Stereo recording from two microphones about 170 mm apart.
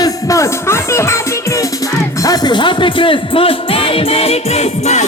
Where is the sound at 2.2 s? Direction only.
25° left (ahead or behind).